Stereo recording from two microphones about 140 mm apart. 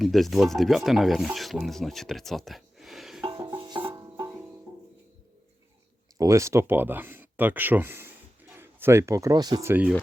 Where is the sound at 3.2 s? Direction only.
35° right (ahead or behind).